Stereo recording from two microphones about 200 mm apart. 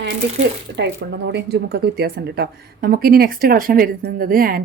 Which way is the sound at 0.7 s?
60° right (ahead or behind).